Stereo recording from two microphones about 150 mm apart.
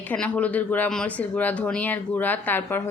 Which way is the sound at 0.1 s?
10° left (ahead or behind).